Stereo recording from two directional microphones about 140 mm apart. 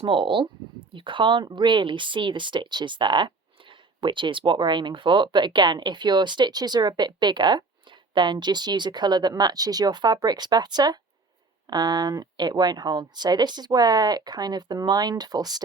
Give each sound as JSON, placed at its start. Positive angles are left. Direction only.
{"t": 0.0, "sound": "speech", "side_deg": -35}